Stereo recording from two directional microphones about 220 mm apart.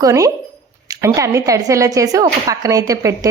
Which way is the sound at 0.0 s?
15° right (ahead or behind).